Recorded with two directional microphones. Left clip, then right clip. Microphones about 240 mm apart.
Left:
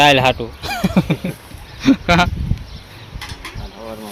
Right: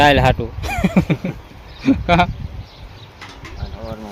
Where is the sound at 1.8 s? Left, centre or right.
Centre.